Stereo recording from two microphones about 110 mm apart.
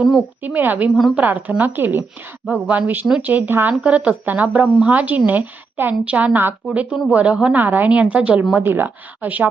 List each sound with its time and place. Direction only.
0.4 s a woman's voice: 15° right (ahead or behind)